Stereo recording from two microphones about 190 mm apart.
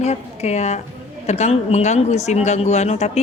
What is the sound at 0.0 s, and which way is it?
Speech, 35° left (ahead or behind).